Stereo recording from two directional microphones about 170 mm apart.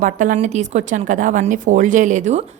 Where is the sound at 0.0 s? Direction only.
50° right (ahead or behind).